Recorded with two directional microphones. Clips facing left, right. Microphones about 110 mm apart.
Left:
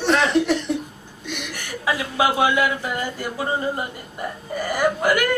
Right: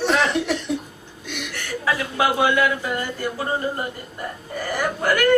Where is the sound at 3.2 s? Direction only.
15° left (ahead or behind).